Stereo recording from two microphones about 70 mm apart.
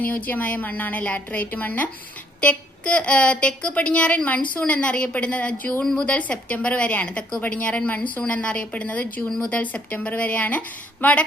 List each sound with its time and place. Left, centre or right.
0.0 s a woman's voice: left
5.8 s a woman's voice: centre
6.1 s a woman's voice: centre